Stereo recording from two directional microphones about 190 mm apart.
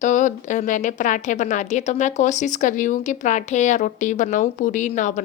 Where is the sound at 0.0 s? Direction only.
40° left (ahead or behind).